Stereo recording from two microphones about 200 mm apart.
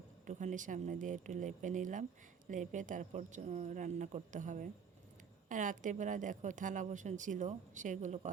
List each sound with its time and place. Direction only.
0.3 s a woman's voice: 40° right (ahead or behind)